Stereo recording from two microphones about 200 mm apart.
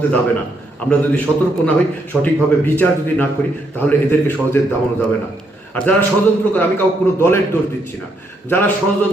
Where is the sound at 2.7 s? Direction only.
10° left (ahead or behind).